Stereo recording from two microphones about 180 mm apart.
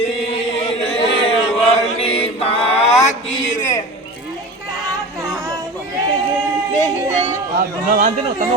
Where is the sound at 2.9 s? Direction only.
40° left (ahead or behind).